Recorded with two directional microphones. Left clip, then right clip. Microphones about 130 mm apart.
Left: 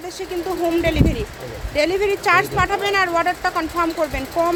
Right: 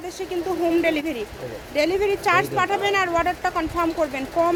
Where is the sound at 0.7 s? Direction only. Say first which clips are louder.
Left 2 dB; 15° right (ahead or behind).